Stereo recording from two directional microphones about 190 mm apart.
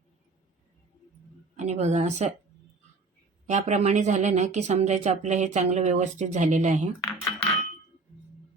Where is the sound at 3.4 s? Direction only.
40° right (ahead or behind).